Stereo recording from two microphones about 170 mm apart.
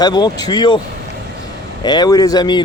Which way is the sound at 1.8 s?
25° left (ahead or behind).